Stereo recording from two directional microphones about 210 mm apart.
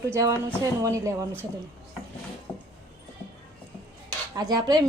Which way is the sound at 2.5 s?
10° left (ahead or behind).